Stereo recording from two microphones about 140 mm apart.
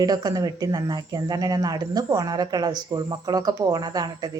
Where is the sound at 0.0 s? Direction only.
30° right (ahead or behind).